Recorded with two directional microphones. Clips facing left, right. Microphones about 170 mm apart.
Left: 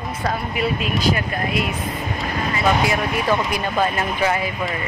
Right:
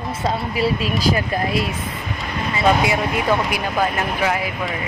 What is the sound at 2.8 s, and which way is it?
Speech, 20° right (ahead or behind).